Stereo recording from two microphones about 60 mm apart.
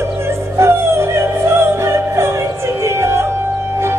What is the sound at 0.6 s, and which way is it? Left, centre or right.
Music, right.